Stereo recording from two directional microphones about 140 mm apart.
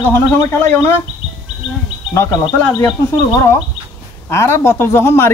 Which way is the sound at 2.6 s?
15° left (ahead or behind).